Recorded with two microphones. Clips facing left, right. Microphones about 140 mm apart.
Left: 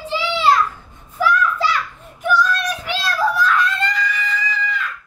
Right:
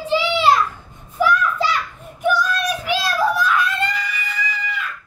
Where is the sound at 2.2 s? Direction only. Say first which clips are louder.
Left 1 dB; 15° right (ahead or behind).